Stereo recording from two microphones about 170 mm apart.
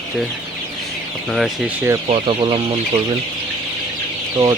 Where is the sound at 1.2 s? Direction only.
Centre (ahead or behind).